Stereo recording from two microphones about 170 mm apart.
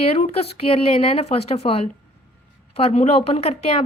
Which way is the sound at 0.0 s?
35° left (ahead or behind).